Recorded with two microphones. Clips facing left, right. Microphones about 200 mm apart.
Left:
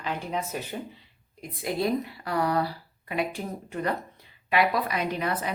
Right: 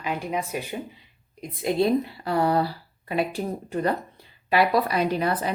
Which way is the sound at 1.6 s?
25° right (ahead or behind).